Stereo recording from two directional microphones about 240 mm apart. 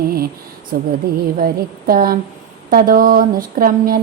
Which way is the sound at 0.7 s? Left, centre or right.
Right.